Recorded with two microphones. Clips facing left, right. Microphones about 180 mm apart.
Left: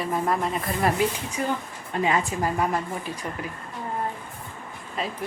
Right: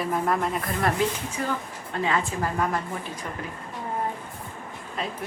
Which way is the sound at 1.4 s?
20° left (ahead or behind).